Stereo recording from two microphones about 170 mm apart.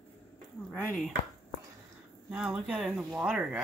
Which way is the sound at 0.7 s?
Centre (ahead or behind).